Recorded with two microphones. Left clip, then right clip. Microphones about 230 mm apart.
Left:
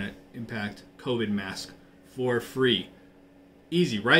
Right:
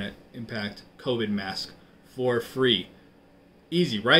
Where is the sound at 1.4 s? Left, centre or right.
Left.